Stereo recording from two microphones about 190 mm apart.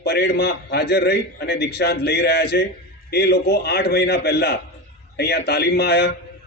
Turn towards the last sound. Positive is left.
turn(degrees=55)  # may be behind; listen again after turning